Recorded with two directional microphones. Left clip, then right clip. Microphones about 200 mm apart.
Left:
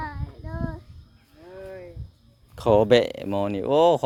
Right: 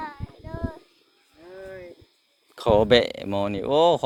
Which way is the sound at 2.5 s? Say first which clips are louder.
Even; 25° left (ahead or behind).